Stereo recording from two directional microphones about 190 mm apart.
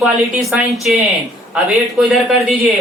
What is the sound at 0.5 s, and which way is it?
A man's voice, centre (ahead or behind).